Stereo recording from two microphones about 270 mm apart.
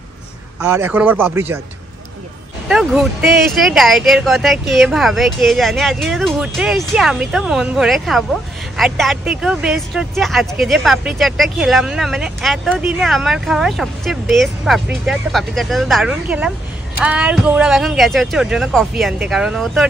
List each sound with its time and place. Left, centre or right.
0.6 s speech: centre
2.7 s speech: centre